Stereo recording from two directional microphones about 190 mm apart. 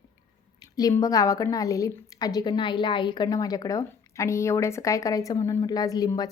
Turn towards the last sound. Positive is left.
turn(degrees=20)  # may be behind; listen again after turning